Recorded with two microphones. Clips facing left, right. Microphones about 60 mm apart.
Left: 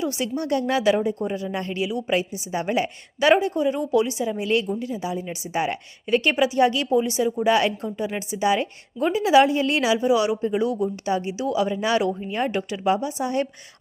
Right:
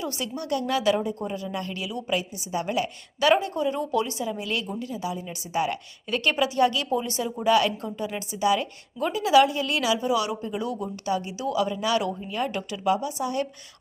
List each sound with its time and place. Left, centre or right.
0.0 s a woman's voice: left